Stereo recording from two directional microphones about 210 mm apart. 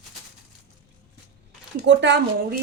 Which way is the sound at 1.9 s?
55° right (ahead or behind).